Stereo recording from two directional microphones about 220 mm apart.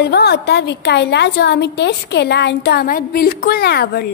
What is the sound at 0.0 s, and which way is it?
A woman's voice, 50° left (ahead or behind).